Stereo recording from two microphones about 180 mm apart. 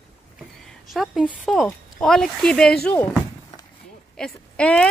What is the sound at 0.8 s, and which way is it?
Speech, centre (ahead or behind).